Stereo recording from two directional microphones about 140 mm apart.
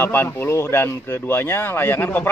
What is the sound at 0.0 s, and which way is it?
Speech, 15° left (ahead or behind).